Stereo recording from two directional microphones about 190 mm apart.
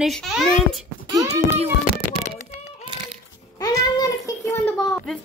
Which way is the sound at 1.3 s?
35° right (ahead or behind).